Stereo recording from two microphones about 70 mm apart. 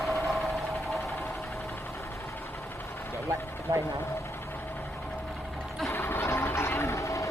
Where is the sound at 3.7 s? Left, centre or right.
Right.